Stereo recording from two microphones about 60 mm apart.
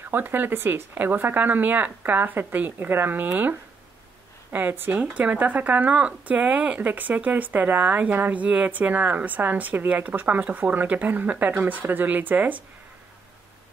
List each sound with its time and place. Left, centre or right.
0.0 s speech: right